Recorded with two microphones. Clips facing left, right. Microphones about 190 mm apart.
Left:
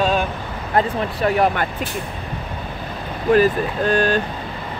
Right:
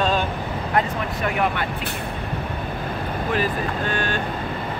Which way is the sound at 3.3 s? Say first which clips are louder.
Left 10 dB; 40° left (ahead or behind).